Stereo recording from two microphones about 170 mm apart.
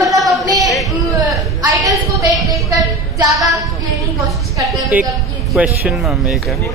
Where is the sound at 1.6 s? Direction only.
20° right (ahead or behind).